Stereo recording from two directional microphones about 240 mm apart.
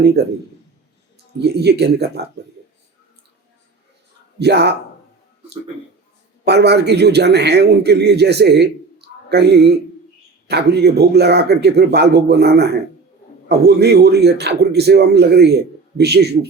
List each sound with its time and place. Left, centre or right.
1.4 s a man's voice: right
4.4 s a man's voice: right
6.4 s a man's voice: right